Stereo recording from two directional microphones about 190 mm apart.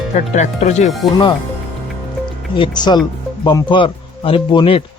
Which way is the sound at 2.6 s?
20° left (ahead or behind).